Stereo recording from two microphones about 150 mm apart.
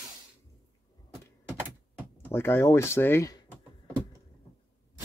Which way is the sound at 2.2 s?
15° left (ahead or behind).